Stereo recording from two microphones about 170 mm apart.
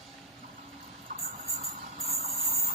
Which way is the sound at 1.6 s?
40° right (ahead or behind).